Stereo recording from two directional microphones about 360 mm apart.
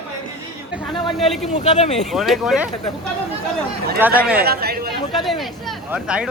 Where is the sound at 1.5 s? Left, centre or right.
Centre.